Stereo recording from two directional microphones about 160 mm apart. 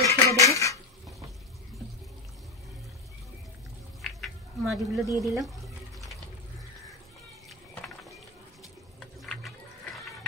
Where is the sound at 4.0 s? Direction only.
Centre (ahead or behind).